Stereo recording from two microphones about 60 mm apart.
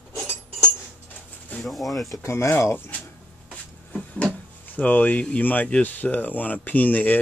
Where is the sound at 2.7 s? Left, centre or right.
Left.